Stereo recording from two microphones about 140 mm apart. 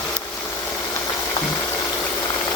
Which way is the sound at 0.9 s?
20° left (ahead or behind).